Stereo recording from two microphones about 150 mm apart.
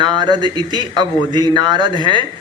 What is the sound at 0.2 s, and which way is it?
A man's voice, 30° right (ahead or behind).